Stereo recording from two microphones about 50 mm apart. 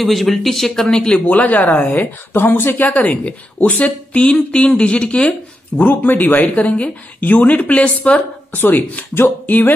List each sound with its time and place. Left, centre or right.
0.0 s speech: centre
1.1 s speech: left
2.0 s speech: left
3.0 s speech: left
5.8 s speech: left
8.5 s speech: left